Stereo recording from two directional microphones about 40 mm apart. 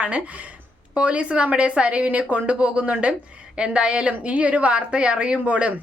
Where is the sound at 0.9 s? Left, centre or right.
Right.